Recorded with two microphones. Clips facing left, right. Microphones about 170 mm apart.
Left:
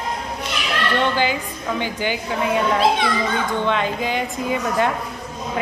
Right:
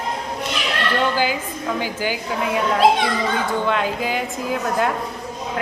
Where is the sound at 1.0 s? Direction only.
5° right (ahead or behind).